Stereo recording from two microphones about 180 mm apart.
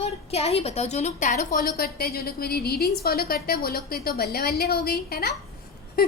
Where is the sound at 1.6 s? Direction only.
60° left (ahead or behind).